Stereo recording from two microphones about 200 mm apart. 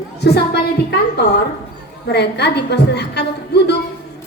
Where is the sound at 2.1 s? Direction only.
55° left (ahead or behind).